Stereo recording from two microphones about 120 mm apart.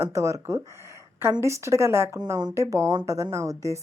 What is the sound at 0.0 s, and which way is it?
Speech, 25° right (ahead or behind).